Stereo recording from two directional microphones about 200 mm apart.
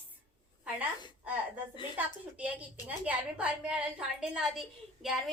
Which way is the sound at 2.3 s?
5° right (ahead or behind).